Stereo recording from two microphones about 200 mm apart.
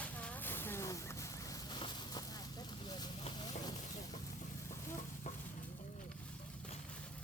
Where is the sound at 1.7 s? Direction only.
25° left (ahead or behind).